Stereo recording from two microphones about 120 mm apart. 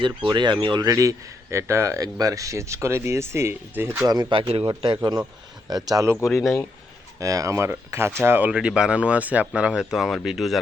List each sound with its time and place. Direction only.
0.0 s speech: 40° right (ahead or behind); by 4.0 s 15° right (ahead or behind)
4.0 s speech: 35° right (ahead or behind); by 4.6 s 50° right (ahead or behind)
4.6 s a man's voice: 35° right (ahead or behind)
6.2 s speech: centre (ahead or behind)
7.2 s speech: 30° right (ahead or behind); by 10.6 s centre (ahead or behind)